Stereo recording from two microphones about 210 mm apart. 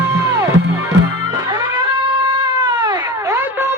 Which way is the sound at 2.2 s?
20° right (ahead or behind).